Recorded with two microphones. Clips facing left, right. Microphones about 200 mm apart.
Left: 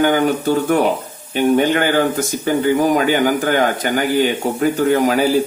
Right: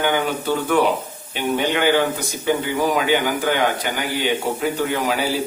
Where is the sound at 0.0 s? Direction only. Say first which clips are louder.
Left 6 dB; 45° left (ahead or behind).